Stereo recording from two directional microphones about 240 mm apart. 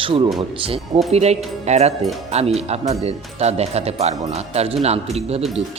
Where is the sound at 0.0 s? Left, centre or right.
Right.